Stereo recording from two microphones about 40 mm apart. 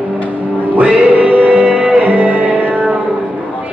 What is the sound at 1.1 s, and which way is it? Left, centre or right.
Music, right.